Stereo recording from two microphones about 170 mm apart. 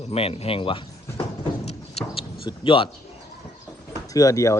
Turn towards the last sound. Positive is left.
turn(degrees=20)  # may be behind; listen again after turning